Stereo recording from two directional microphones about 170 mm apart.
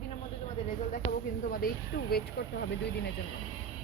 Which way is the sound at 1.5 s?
65° left (ahead or behind).